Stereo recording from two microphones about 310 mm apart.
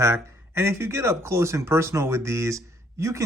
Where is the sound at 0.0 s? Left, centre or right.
Centre.